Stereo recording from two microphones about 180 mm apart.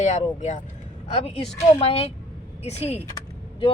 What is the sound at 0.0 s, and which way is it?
Speech, 40° left (ahead or behind).